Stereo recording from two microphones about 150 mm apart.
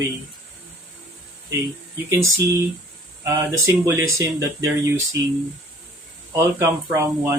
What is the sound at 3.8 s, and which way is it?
Male singing, 20° right (ahead or behind).